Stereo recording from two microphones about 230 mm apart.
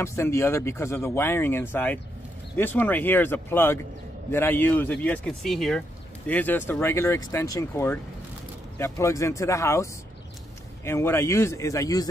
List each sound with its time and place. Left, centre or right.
0.0 s speech: centre